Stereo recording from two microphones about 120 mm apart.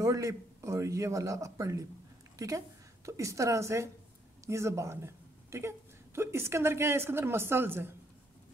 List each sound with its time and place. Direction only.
0.0 s a woman's voice: 25° right (ahead or behind)